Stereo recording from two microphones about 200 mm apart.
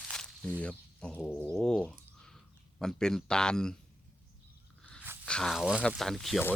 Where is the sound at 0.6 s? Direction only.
5° left (ahead or behind).